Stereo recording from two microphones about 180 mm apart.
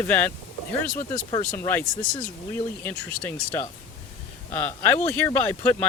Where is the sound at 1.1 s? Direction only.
25° left (ahead or behind).